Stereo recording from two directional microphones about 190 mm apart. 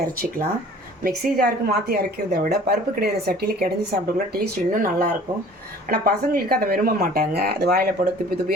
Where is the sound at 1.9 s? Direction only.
55° right (ahead or behind).